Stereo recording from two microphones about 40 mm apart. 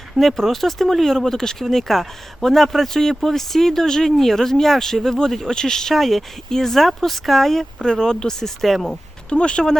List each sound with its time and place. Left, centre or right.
0.2 s speech: centre
8.6 s speech: centre
9.3 s speech: left